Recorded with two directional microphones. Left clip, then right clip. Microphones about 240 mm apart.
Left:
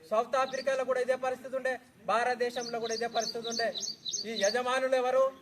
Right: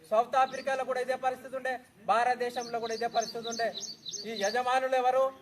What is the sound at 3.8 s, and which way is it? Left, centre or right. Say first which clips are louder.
Speech: left 3 dB; left.